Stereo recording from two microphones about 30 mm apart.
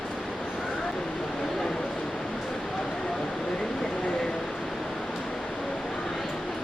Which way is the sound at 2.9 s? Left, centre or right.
Centre.